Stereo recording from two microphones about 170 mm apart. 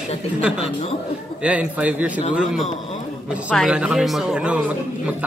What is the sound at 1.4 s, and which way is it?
Speech, 10° right (ahead or behind).